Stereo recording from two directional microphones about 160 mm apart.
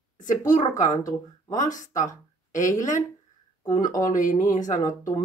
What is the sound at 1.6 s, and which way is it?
Speech, 50° left (ahead or behind).